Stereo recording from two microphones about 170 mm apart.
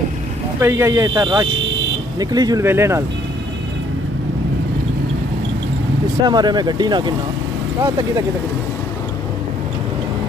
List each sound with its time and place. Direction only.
0.6 s speech: 15° right (ahead or behind)
6.2 s speech: 25° right (ahead or behind)